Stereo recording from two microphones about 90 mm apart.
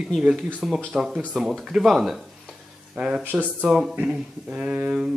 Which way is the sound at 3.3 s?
20° right (ahead or behind).